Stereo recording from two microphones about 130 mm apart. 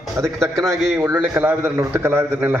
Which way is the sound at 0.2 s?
20° right (ahead or behind).